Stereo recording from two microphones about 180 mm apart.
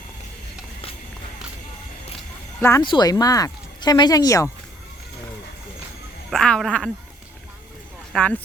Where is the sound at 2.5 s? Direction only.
15° left (ahead or behind).